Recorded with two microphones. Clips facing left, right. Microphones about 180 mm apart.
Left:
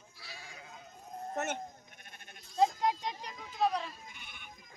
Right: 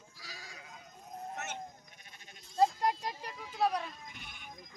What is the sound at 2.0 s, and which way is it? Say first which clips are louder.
Sheep: left 3 dB; 55° left (ahead or behind).